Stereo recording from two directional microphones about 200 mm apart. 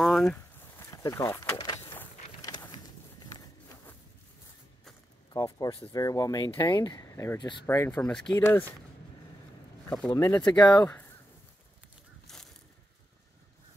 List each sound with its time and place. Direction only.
0.0 s walk: centre (ahead or behind)
0.9 s a sound: 15° left (ahead or behind)
5.3 s speech: 20° left (ahead or behind)
7.6 s speech: 10° left (ahead or behind)
9.8 s speech: 15° left (ahead or behind)
12.3 s a sound: centre (ahead or behind)